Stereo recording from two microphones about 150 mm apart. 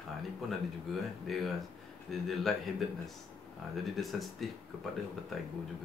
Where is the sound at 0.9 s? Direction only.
Centre (ahead or behind).